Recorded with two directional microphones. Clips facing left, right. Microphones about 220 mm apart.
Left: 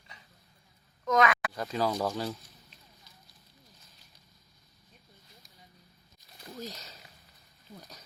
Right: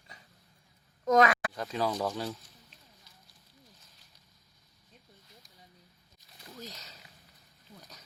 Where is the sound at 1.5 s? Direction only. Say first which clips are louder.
Left 1 dB; 5° left (ahead or behind).